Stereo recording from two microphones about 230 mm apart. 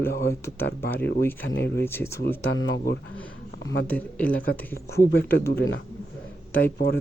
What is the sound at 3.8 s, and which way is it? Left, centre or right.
Speech, centre.